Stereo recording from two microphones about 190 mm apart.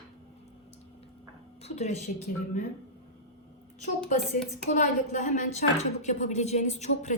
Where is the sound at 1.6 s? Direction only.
35° left (ahead or behind).